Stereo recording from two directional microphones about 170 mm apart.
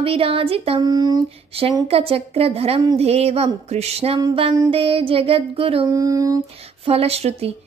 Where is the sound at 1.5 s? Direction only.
35° right (ahead or behind).